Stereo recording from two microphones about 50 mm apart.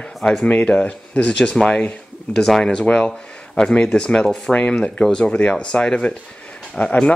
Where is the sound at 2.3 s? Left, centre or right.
Centre.